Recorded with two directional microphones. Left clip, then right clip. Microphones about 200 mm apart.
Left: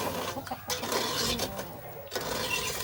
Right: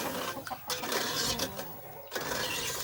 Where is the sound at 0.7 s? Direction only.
Centre (ahead or behind).